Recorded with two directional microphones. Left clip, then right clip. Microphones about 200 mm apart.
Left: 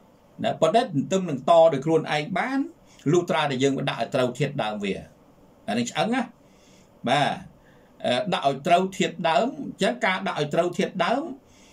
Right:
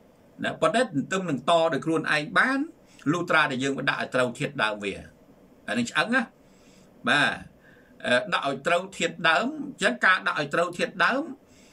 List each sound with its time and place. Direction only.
0.4 s speech: 15° left (ahead or behind)